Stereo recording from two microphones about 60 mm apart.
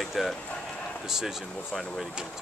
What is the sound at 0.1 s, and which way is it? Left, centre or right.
Speech, centre.